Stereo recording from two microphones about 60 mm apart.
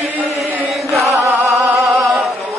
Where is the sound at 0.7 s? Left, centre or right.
Centre.